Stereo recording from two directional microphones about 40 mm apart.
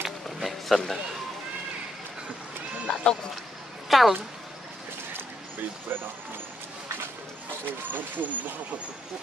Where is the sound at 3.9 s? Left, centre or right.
Centre.